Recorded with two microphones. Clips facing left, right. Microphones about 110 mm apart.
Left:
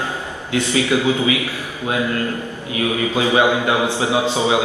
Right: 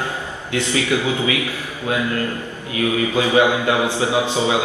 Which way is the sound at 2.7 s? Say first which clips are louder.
Right 1 dB; 20° left (ahead or behind).